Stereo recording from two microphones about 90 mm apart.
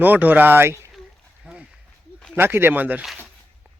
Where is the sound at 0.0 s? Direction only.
20° right (ahead or behind).